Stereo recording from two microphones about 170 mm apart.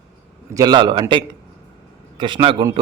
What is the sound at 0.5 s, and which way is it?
A man's voice, 25° right (ahead or behind).